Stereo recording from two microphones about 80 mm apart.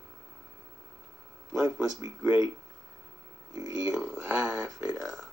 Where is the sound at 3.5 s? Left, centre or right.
Right.